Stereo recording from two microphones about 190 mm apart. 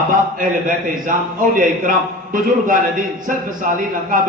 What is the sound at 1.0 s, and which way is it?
A man's voice, 45° right (ahead or behind).